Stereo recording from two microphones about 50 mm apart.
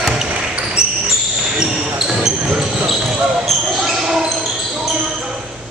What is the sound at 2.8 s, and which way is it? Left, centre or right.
Basketball bounce, centre.